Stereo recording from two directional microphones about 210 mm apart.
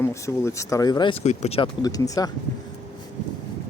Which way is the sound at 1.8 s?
15° left (ahead or behind).